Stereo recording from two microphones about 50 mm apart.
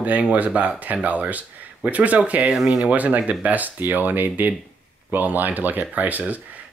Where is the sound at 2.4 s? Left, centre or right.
Centre.